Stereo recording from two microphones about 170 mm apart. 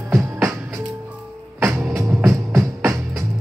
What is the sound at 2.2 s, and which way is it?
Music, 15° right (ahead or behind).